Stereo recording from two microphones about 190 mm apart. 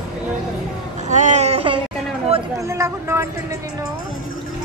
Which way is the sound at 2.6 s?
15° right (ahead or behind).